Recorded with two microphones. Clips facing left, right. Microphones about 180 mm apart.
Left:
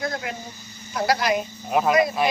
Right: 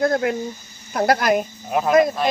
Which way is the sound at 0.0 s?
55° right (ahead or behind).